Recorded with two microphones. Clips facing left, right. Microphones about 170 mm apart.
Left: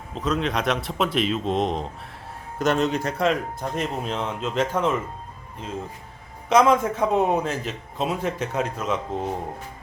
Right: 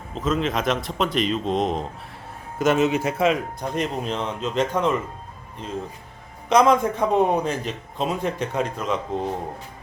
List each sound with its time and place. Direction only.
0.1 s a man's voice: centre (ahead or behind)
6.5 s a man's voice: 5° left (ahead or behind)